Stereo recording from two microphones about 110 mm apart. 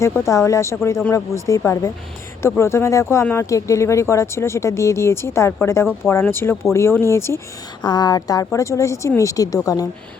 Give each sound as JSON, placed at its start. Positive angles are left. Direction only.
{"t": 0.3, "sound": "speech", "side_deg": 30}
{"t": 7.8, "sound": "a woman's voice", "side_deg": 40}